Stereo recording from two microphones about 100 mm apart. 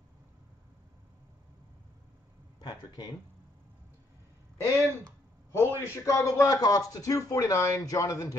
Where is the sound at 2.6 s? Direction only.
45° left (ahead or behind).